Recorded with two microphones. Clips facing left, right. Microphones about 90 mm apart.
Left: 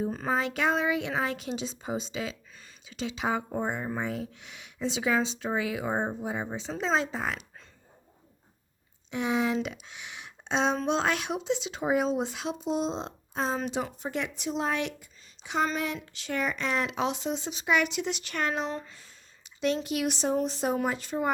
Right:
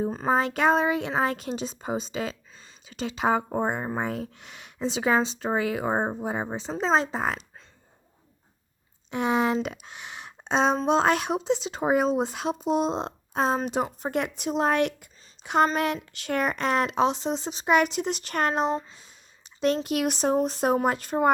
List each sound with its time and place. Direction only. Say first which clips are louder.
0.3 s speech: right 6 dB; 40° right (ahead or behind)
9.0 s speech: right 4 dB; 50° right (ahead or behind)
13.6 s speech: right 4 dB; 45° right (ahead or behind)
16.9 s speech: right 5 dB; 35° right (ahead or behind)
18.7 s a sound: right 7 dB; 20° right (ahead or behind)
19.5 s speech: right 4 dB; 45° right (ahead or behind)